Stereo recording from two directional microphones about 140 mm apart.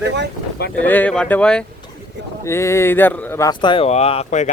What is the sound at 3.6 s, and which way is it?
Speech, 35° left (ahead or behind).